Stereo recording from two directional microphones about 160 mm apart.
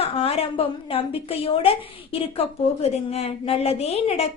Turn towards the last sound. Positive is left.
turn(degrees=40)  # may be behind; listen again after turning